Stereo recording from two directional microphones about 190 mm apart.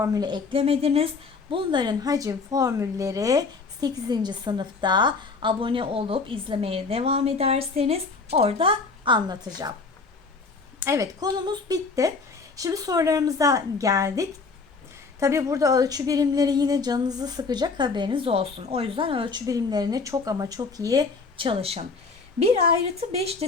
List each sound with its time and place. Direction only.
0.0 s a woman's voice: 20° right (ahead or behind)
10.8 s a woman's voice: 15° right (ahead or behind); by 21.8 s 30° right (ahead or behind)
23.0 s a woman's voice: 30° right (ahead or behind)